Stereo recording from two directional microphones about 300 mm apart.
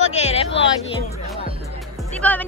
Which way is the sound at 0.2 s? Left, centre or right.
Left.